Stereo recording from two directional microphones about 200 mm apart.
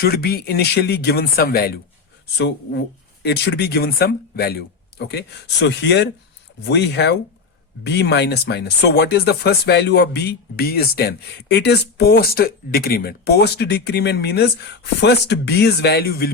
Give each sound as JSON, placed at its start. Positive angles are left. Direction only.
{"t": 0.0, "sound": "speech", "side_deg": 50}
{"t": 3.2, "sound": "speech", "side_deg": 55}